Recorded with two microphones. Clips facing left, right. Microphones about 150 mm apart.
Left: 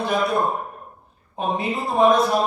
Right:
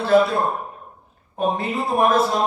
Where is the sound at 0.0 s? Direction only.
15° left (ahead or behind).